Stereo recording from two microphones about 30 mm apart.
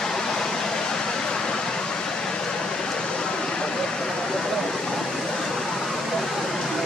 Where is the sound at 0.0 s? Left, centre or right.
Centre.